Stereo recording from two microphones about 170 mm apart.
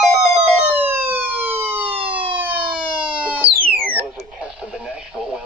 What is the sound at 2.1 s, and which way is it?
Emergency vehicle, 30° right (ahead or behind).